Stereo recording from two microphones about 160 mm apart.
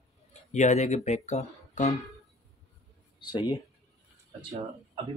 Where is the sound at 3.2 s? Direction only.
25° left (ahead or behind).